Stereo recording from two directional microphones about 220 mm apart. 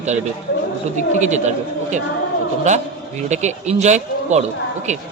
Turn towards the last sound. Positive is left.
turn(degrees=-30)  # may be behind; listen again after turning